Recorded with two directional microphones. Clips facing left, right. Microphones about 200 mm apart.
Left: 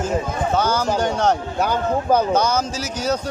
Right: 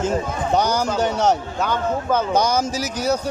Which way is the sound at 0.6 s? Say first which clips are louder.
Right 1 dB; 15° right (ahead or behind).